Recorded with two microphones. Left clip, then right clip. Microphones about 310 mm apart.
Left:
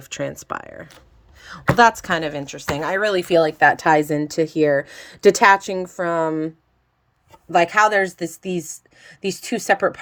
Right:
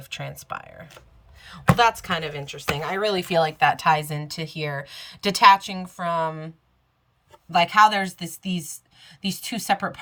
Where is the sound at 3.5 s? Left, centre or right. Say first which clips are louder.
Left 4 dB; centre.